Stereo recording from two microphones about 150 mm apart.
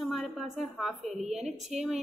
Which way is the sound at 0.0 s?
Centre (ahead or behind).